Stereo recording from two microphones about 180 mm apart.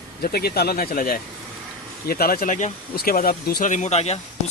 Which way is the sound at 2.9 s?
55° left (ahead or behind).